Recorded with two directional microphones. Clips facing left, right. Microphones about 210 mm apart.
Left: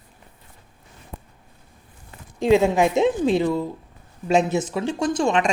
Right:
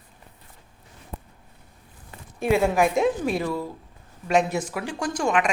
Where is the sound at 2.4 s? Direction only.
20° left (ahead or behind).